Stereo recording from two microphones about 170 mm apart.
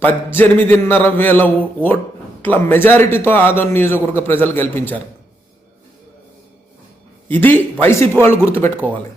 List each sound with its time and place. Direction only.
0.0 s a man's voice: 10° left (ahead or behind)
7.3 s a man's voice: 10° left (ahead or behind)